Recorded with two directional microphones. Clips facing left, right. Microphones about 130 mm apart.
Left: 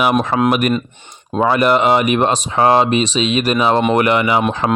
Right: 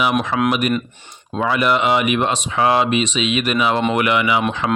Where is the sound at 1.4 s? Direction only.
40° left (ahead or behind).